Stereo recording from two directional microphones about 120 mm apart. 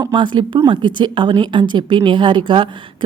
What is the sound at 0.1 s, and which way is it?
A woman's voice, 40° right (ahead or behind).